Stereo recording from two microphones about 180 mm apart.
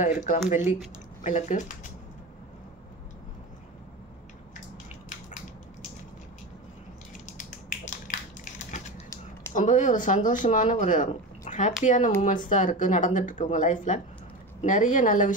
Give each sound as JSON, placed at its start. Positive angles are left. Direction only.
{"t": 0.0, "sound": "speech", "side_deg": 45}
{"t": 7.3, "sound": "finger snapping", "side_deg": 45}
{"t": 9.5, "sound": "speech", "side_deg": 45}